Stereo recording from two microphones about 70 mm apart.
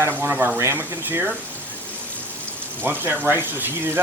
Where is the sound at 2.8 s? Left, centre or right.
Right.